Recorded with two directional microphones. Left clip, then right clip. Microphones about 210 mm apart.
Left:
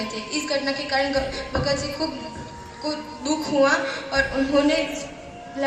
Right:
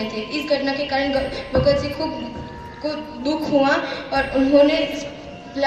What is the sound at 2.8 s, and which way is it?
A woman's voice, 45° right (ahead or behind).